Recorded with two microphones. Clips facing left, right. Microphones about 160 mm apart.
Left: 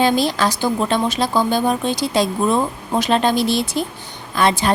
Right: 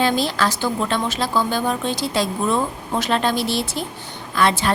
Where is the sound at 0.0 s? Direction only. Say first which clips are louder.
Left 3 dB; 15° left (ahead or behind).